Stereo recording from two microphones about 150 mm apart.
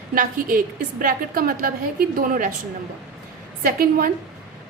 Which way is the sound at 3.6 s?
75° right (ahead or behind).